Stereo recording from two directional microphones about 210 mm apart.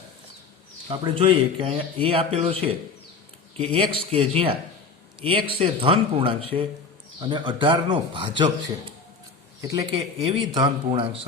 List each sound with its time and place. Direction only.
0.9 s speech: 25° right (ahead or behind)
9.6 s speech: 20° right (ahead or behind)